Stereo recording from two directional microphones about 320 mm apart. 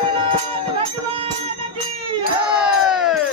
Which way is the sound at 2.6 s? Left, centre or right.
Centre.